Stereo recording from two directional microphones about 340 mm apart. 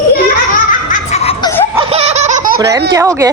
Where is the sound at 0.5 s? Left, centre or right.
Left.